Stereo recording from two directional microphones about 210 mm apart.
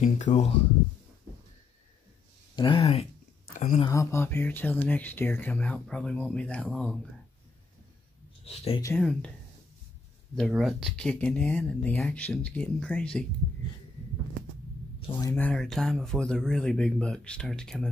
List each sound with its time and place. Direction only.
0.0 s speech: 35° left (ahead or behind)
2.5 s speech: 20° left (ahead or behind)
3.4 s speech: 40° left (ahead or behind)
3.8 s speech: 15° left (ahead or behind)
8.8 s speech: 5° left (ahead or behind)
10.3 s speech: centre (ahead or behind)
15.0 s speech: 20° left (ahead or behind)
15.3 s speech: 5° left (ahead or behind)